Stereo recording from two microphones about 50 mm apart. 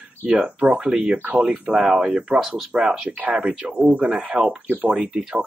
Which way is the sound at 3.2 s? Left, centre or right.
Right.